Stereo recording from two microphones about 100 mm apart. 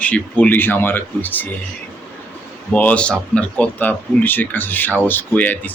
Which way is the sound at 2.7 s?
15° left (ahead or behind).